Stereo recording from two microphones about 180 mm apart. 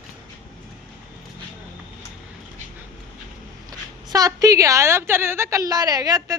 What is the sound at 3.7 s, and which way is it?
A woman's voice, 20° right (ahead or behind).